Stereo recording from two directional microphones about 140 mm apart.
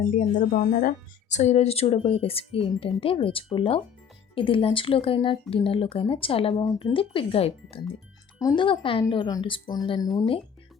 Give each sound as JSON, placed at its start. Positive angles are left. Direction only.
{"t": 0.1, "sound": "speech", "side_deg": 65}
{"t": 8.4, "sound": "speech", "side_deg": 30}